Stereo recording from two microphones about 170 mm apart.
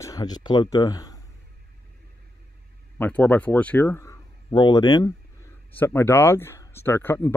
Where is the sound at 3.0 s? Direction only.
10° left (ahead or behind).